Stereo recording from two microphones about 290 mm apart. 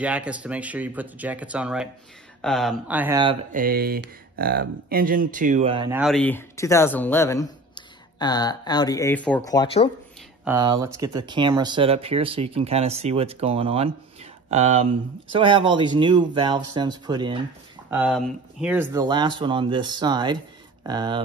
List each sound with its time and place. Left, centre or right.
0.0 s speech: centre
3.5 s speech: right
5.9 s speech: centre
10.4 s speech: centre